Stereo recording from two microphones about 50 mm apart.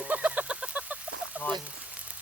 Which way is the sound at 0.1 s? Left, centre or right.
Right.